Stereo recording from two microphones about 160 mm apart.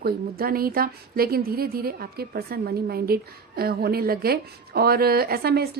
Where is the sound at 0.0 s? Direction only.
70° right (ahead or behind).